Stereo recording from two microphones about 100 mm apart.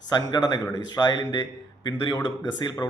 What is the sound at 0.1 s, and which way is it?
Speech, 45° left (ahead or behind).